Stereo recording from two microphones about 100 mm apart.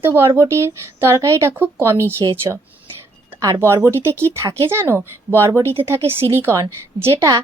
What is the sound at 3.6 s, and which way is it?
A woman's voice, 25° right (ahead or behind).